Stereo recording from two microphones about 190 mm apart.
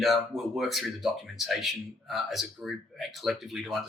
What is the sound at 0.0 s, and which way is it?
Speech, centre (ahead or behind).